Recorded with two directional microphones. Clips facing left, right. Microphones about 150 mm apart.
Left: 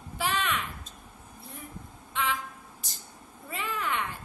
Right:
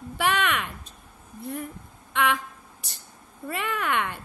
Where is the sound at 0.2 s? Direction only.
65° right (ahead or behind).